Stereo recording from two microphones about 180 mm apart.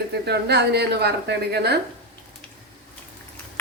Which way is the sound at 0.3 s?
65° right (ahead or behind).